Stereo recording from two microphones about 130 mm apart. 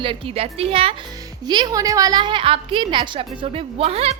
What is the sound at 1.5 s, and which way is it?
A woman's voice, 30° right (ahead or behind).